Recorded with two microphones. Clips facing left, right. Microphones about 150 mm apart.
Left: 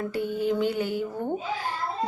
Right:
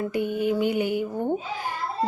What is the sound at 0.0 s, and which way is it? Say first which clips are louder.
A child's voice: right 2 dB; 15° right (ahead or behind).